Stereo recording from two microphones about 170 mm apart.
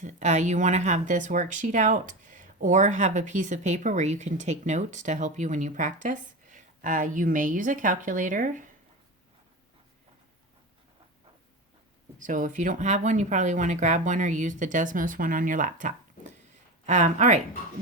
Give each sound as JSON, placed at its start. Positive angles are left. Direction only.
{"t": 0.0, "sound": "speech", "side_deg": -45}
{"t": 12.2, "sound": "speech", "side_deg": -50}